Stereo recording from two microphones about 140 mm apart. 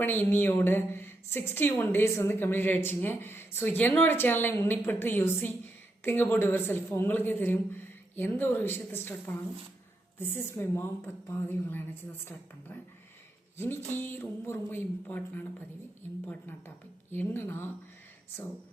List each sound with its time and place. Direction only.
0.0 s a woman's voice: 15° left (ahead or behind)